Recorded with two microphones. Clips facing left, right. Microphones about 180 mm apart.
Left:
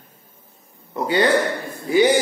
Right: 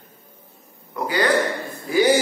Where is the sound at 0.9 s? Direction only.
25° left (ahead or behind).